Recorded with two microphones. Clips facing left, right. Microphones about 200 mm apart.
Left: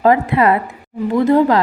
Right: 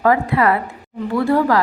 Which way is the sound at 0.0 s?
20° left (ahead or behind).